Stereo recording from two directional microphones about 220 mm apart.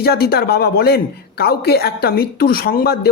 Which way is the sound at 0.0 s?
45° left (ahead or behind).